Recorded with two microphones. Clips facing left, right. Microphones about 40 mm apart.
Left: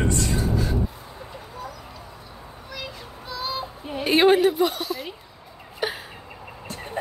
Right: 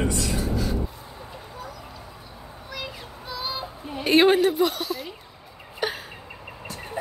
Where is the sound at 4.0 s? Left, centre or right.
Centre.